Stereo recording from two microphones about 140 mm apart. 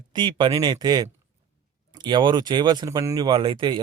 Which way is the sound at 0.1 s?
35° right (ahead or behind).